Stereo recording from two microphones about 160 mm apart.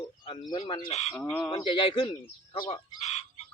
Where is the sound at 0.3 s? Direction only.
30° left (ahead or behind).